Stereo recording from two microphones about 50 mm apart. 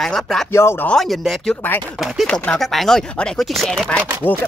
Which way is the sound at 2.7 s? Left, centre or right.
Centre.